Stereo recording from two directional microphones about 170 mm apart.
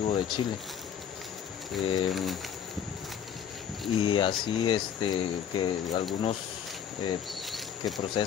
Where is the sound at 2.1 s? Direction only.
Centre (ahead or behind).